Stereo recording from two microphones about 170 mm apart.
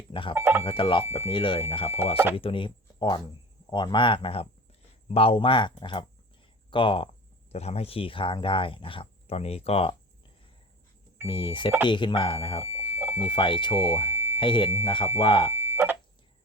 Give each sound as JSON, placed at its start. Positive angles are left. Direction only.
{"t": 0.1, "sound": "speech", "side_deg": 30}
{"t": 0.3, "sound": "speech", "side_deg": -15}
{"t": 0.6, "sound": "speech", "side_deg": 30}
{"t": 11.3, "sound": "speech", "side_deg": 30}
{"t": 12.6, "sound": "alarm", "side_deg": -15}
{"t": 13.2, "sound": "speech", "side_deg": 30}
{"t": 15.5, "sound": "a sound", "side_deg": -15}